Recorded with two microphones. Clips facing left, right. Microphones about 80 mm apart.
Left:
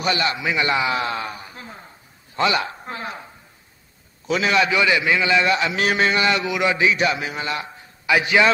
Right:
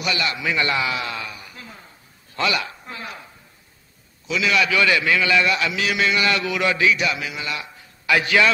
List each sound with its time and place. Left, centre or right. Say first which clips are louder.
0.0 s a man's voice: left 2 dB; left
0.9 s a man's voice: left 4 dB; left
4.3 s a man's voice: left 2 dB; left
5.8 s speech: left 2 dB; left
6.2 s a man's voice: left 1 dB; left
8.1 s a man's voice: left 1 dB; centre